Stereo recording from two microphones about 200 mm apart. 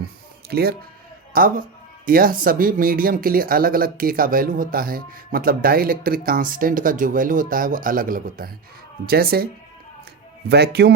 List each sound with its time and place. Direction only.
0.5 s speech: 50° right (ahead or behind)
10.5 s a man's voice: 55° right (ahead or behind)